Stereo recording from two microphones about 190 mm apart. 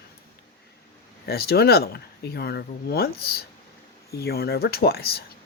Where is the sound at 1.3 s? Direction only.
55° left (ahead or behind).